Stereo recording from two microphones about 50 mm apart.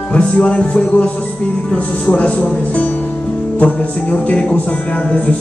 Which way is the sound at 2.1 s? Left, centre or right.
Left.